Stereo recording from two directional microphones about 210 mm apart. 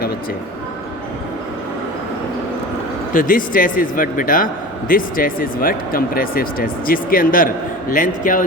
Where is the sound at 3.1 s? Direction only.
40° left (ahead or behind).